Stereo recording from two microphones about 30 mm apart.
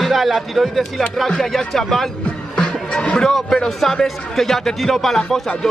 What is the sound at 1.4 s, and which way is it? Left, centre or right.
Speech, centre.